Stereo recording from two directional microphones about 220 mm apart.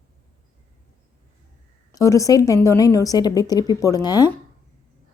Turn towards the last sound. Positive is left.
turn(degrees=20)  # may be behind; listen again after turning